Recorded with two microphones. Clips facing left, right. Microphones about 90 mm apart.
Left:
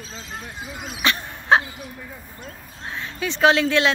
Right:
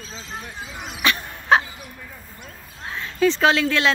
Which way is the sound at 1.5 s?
20° left (ahead or behind).